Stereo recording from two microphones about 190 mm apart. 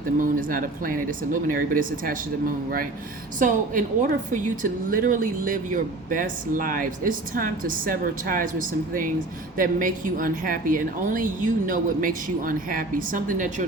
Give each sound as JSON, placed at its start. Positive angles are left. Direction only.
{"t": 0.2, "sound": "a woman's voice", "side_deg": -45}
{"t": 3.3, "sound": "a woman's voice", "side_deg": -45}